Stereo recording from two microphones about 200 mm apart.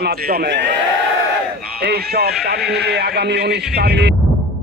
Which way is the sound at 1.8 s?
50° right (ahead or behind).